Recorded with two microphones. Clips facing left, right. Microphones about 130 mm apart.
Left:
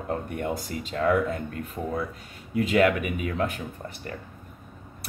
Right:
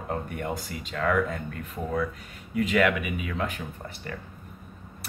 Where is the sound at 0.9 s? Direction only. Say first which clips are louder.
Left 2 dB; 35° left (ahead or behind).